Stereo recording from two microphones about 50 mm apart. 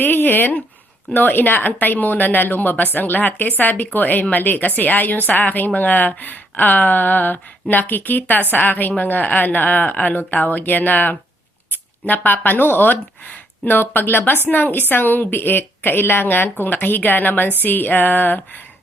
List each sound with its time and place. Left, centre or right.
0.0 s a woman's voice: left